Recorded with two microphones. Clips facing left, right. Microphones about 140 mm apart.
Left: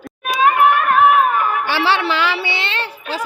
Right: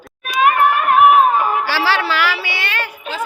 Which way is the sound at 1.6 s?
20° left (ahead or behind).